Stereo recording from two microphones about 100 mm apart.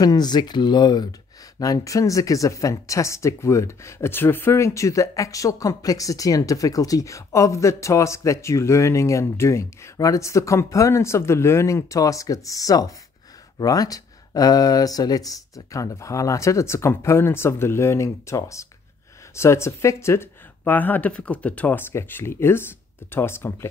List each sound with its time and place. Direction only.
0.0 s speech: 45° left (ahead or behind)
1.6 s speech: 35° left (ahead or behind)